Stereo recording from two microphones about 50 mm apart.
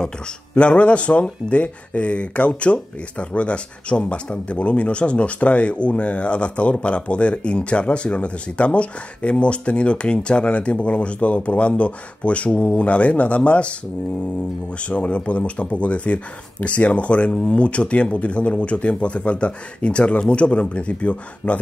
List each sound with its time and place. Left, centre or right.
0.6 s speech: left
14.8 s speech: left